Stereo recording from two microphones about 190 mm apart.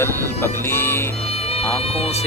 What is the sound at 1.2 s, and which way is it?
Music, 30° left (ahead or behind).